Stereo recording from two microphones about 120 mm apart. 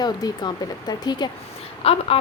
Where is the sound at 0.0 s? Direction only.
35° left (ahead or behind).